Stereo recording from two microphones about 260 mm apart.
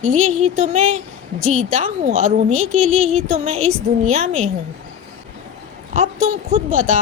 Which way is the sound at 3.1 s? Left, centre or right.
Right.